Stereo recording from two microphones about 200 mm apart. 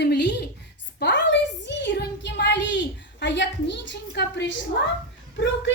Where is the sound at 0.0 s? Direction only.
60° left (ahead or behind).